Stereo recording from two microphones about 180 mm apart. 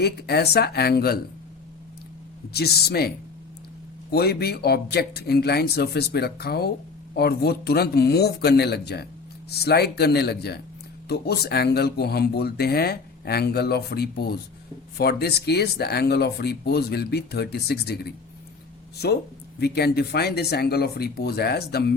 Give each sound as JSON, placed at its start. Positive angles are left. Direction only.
{"t": 0.0, "sound": "speech", "side_deg": 65}
{"t": 2.5, "sound": "speech", "side_deg": 60}
{"t": 4.1, "sound": "speech", "side_deg": 60}
{"t": 19.5, "sound": "speech", "side_deg": 65}